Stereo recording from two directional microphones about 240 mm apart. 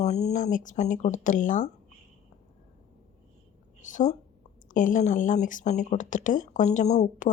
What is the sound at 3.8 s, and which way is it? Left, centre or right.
A woman's voice, left.